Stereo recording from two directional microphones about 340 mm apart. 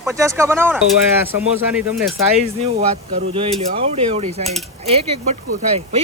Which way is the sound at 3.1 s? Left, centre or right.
Centre.